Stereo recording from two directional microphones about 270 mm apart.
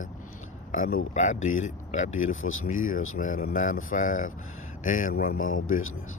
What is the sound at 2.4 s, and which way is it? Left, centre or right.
Speech, left.